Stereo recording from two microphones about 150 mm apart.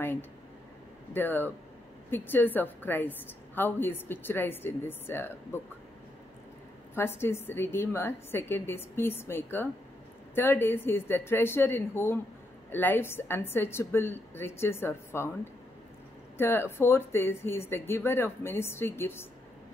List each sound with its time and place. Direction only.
0.0 s a woman's voice: 15° left (ahead or behind)
7.0 s a woman's voice: 15° left (ahead or behind)
16.3 s a woman's voice: 15° left (ahead or behind)